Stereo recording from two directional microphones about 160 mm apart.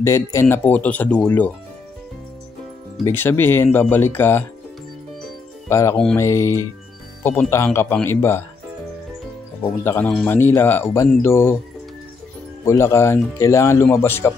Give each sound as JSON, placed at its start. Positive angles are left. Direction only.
{"t": 0.0, "sound": "speech", "side_deg": 15}
{"t": 3.1, "sound": "speech", "side_deg": 15}
{"t": 5.7, "sound": "speech", "side_deg": 15}
{"t": 9.6, "sound": "speech", "side_deg": 10}
{"t": 12.6, "sound": "speech", "side_deg": 15}